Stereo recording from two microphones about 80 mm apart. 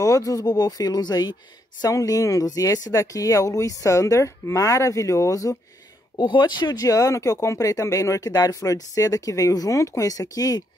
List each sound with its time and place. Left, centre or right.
0.0 s speech: left
1.8 s speech: left
6.1 s speech: left